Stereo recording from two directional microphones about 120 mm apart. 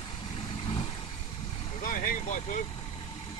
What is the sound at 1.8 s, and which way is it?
Vehicle, 90° left.